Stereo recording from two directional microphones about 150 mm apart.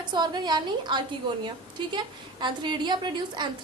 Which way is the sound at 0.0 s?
30° right (ahead or behind).